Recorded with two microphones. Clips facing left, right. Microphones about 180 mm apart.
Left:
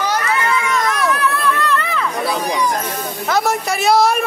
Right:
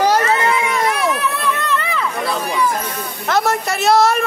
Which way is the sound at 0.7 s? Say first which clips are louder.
Even; 30° right (ahead or behind).